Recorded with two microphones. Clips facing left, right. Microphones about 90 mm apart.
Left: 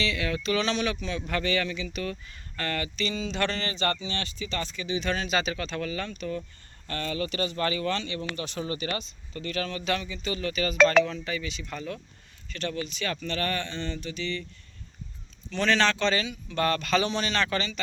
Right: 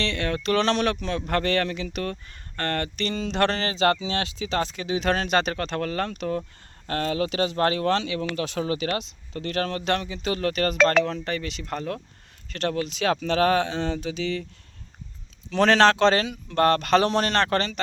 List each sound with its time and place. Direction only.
0.0 s a man's voice: 55° right (ahead or behind)
2.6 s speech: 55° right (ahead or behind)
12.5 s speech: 75° right (ahead or behind)
15.4 s a man's voice: 85° right; by 17.7 s 60° right (ahead or behind)